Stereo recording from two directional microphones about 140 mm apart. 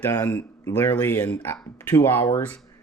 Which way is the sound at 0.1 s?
20° left (ahead or behind).